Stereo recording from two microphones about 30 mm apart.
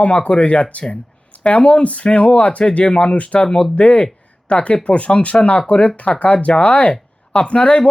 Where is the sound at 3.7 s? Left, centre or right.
Left.